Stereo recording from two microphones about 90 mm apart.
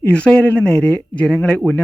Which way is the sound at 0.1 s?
15° left (ahead or behind).